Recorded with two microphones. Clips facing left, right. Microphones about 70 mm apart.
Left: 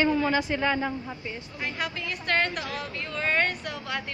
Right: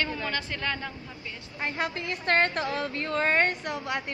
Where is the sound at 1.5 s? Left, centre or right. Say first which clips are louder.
Right 3 dB; right.